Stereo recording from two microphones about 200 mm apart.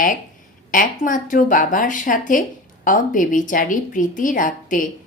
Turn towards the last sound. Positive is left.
turn(degrees=40)  # may be behind; listen again after turning